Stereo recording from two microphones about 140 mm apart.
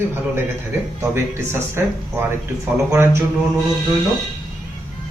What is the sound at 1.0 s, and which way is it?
Speech, 15° right (ahead or behind).